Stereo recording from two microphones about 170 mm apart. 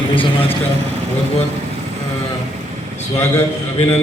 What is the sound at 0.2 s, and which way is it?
Speech, 35° left (ahead or behind).